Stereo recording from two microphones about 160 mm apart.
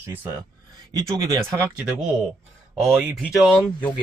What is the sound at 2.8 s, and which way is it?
Speech, 5° right (ahead or behind).